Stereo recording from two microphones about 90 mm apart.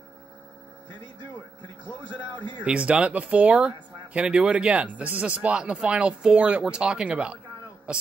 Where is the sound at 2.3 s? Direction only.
60° right (ahead or behind).